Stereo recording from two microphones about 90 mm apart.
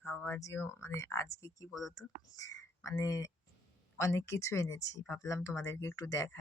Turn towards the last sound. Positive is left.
turn(degrees=40)  # may be behind; listen again after turning